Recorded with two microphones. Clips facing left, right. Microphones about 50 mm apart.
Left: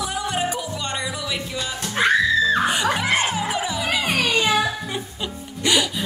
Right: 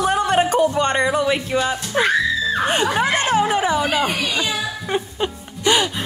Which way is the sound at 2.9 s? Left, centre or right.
Right.